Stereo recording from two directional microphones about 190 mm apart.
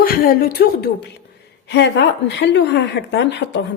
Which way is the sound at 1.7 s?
65° left (ahead or behind).